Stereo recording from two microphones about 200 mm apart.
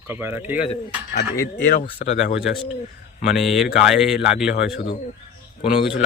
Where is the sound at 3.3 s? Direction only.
Centre (ahead or behind).